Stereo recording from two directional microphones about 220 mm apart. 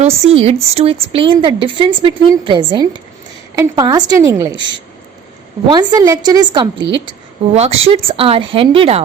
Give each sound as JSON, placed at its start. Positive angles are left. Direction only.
{"t": 0.0, "sound": "a woman's voice", "side_deg": -25}
{"t": 5.6, "sound": "speech", "side_deg": -20}